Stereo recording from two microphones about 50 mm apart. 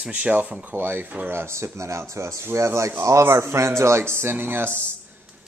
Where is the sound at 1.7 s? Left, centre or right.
Right.